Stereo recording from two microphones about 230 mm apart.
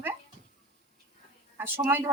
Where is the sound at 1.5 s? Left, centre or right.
Centre.